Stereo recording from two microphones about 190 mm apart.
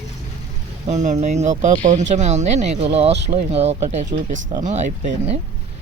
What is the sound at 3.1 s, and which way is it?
Speech, 65° right (ahead or behind).